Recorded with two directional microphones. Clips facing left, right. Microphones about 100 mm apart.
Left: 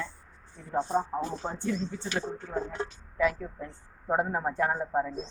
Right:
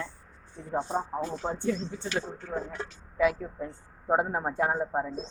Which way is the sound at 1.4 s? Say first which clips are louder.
Right 2 dB; 20° right (ahead or behind).